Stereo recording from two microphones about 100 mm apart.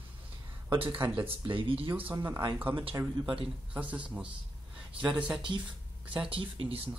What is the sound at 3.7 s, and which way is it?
Speech, 15° right (ahead or behind).